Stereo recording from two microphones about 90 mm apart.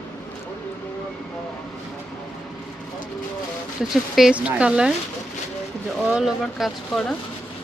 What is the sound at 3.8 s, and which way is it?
A woman's voice, 5° right (ahead or behind).